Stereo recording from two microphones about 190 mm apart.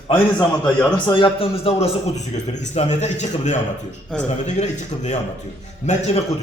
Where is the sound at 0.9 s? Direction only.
25° left (ahead or behind).